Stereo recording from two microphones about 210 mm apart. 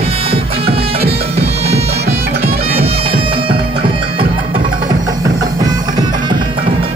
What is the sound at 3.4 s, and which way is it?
Music, 25° right (ahead or behind).